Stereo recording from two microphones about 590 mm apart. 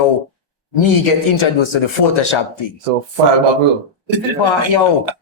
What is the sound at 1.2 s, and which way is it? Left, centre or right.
A man's voice, left.